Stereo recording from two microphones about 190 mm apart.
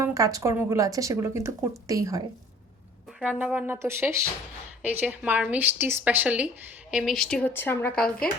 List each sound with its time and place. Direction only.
0.0 s speech: 15° right (ahead or behind)
3.2 s speech: 5° right (ahead or behind)